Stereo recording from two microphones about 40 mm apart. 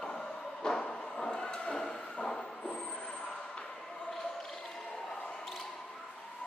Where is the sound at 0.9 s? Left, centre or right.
Centre.